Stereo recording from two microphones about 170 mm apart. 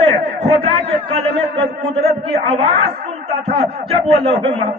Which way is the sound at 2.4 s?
35° right (ahead or behind).